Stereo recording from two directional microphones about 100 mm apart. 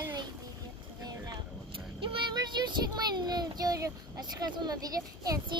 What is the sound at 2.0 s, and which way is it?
Vehicle, 55° right (ahead or behind).